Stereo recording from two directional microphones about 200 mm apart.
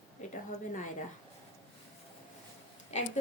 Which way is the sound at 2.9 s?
35° left (ahead or behind).